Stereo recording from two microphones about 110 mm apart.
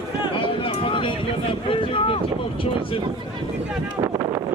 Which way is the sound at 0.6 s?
55° left (ahead or behind).